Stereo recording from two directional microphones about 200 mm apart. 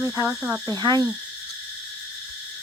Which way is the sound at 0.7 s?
20° right (ahead or behind).